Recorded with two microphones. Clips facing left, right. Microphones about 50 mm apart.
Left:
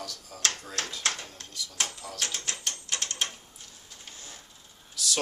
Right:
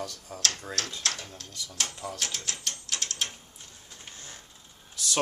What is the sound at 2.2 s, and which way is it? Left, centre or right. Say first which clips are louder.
Mechanisms: left 5 dB; centre.